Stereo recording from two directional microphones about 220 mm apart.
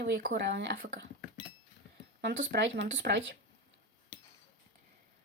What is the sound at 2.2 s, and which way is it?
Speech, 50° right (ahead or behind).